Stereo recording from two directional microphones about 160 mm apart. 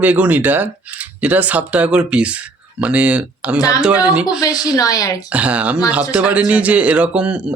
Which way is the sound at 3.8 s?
5° right (ahead or behind).